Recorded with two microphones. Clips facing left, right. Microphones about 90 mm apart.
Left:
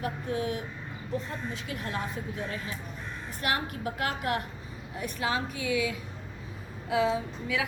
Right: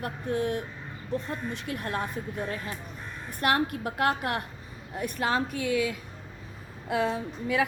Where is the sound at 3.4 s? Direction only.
50° right (ahead or behind).